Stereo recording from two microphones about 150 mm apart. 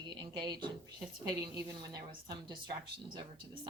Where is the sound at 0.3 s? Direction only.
30° right (ahead or behind).